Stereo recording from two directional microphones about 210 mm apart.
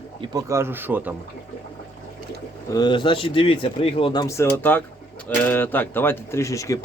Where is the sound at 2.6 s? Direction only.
20° left (ahead or behind).